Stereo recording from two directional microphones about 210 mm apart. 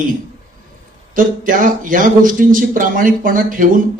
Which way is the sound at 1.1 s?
40° right (ahead or behind).